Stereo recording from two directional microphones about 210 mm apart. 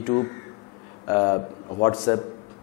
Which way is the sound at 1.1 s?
20° left (ahead or behind).